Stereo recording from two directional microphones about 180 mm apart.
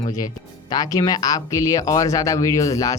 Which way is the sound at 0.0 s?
20° left (ahead or behind).